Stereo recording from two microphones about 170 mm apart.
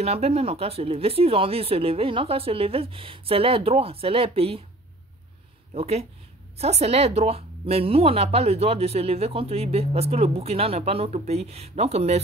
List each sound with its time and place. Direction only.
0.0 s speech: 35° right (ahead or behind)
5.8 s speech: 35° right (ahead or behind)